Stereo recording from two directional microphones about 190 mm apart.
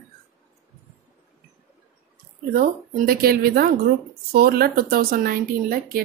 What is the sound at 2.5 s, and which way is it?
A woman's voice, 50° right (ahead or behind).